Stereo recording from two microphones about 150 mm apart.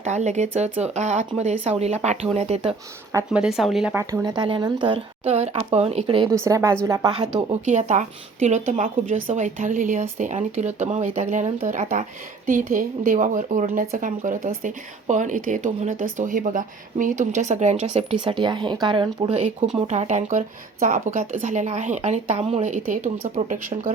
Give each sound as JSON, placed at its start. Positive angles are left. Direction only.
{"t": 0.0, "sound": "speech", "side_deg": -50}
{"t": 3.3, "sound": "speech", "side_deg": -5}
{"t": 3.9, "sound": "a woman's voice", "side_deg": -20}
{"t": 6.1, "sound": "a woman's voice", "side_deg": -20}
{"t": 7.3, "sound": "speech", "side_deg": -50}
{"t": 19.3, "sound": "speech", "side_deg": -50}